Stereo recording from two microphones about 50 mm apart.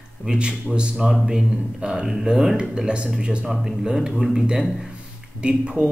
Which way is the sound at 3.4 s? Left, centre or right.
Centre.